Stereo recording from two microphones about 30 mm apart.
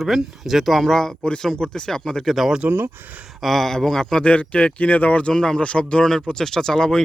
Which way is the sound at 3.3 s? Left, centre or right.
Centre.